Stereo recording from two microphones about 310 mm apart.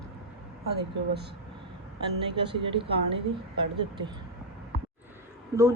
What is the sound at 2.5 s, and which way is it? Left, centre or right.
Speech, centre.